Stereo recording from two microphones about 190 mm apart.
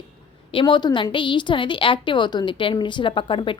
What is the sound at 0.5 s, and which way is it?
A woman's voice, 25° left (ahead or behind).